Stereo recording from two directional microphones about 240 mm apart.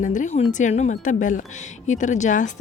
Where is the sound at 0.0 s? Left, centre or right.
Left.